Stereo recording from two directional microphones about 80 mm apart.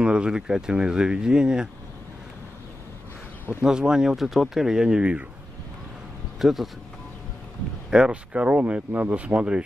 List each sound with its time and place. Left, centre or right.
0.0 s speech: centre
3.6 s speech: centre
6.4 s speech: centre
7.9 s speech: centre